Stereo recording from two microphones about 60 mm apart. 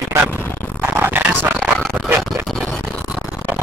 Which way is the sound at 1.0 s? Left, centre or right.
Right.